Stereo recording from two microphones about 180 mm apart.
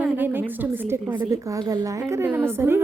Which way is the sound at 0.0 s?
10° right (ahead or behind).